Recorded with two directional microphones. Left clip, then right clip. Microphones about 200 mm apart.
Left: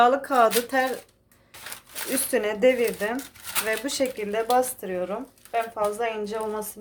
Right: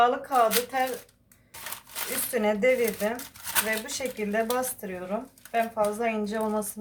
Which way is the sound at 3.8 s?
45° left (ahead or behind).